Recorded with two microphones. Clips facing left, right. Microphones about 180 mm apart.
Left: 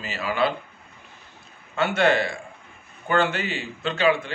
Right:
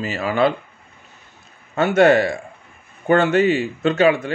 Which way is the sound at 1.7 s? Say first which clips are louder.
Right 7 dB; 45° right (ahead or behind).